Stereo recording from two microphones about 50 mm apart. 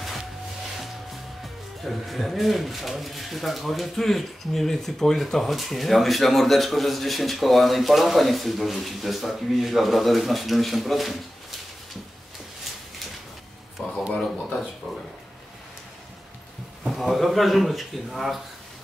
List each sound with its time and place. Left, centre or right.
1.9 s speech: centre
13.8 s a sound: left
16.8 s speech: centre